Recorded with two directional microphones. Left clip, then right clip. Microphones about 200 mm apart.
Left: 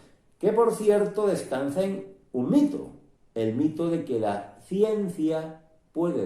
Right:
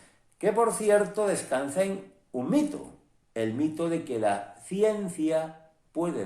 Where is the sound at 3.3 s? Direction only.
20° right (ahead or behind).